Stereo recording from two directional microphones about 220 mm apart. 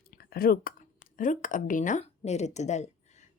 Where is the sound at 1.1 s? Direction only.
35° left (ahead or behind).